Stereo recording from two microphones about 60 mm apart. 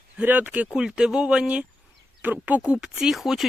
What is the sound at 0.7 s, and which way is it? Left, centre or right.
Speech, centre.